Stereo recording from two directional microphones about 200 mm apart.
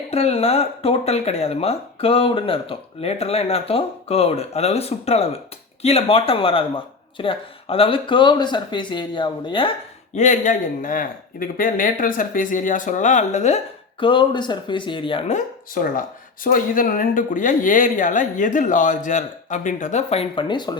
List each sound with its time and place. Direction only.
0.1 s speech: 30° left (ahead or behind)
10.2 s speech: 40° left (ahead or behind)
14.0 s speech: 25° left (ahead or behind)
15.4 s speech: 45° left (ahead or behind); by 20.7 s 20° left (ahead or behind)